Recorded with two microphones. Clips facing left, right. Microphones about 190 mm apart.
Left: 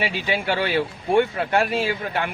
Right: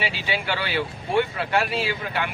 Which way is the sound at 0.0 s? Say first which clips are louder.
Left 3 dB; 50° left (ahead or behind).